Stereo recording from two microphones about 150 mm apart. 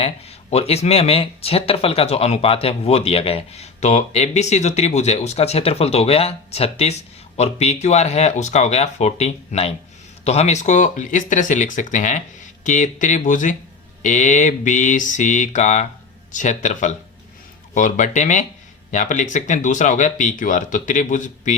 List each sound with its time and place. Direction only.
0.0 s speech: 45° left (ahead or behind)